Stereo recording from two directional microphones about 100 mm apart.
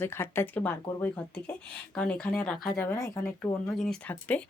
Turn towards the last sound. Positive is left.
turn(degrees=15)  # may be behind; listen again after turning